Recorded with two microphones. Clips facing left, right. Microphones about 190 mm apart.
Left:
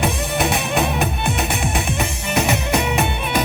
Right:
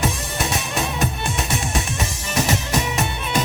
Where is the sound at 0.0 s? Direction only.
60° left (ahead or behind).